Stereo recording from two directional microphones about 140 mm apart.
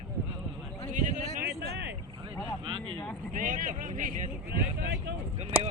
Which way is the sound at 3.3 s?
70° right (ahead or behind).